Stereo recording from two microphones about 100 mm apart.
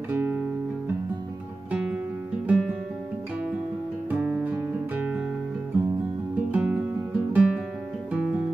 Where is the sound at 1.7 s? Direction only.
10° right (ahead or behind).